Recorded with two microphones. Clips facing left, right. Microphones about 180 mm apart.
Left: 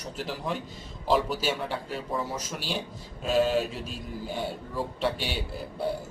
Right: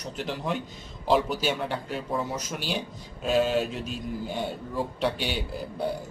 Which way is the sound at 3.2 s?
Centre (ahead or behind).